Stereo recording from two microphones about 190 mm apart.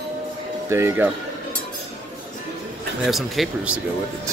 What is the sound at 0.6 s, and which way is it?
Speech, 15° right (ahead or behind).